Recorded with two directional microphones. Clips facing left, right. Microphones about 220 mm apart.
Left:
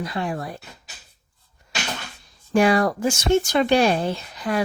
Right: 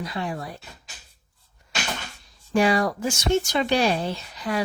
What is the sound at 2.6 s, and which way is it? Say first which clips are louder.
Speech: left 3 dB; 55° left (ahead or behind).